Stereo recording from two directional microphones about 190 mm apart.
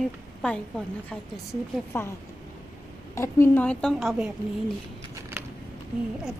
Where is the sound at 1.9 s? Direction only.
10° left (ahead or behind).